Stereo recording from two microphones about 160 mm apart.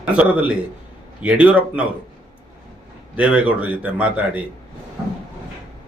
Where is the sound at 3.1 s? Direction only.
10° right (ahead or behind).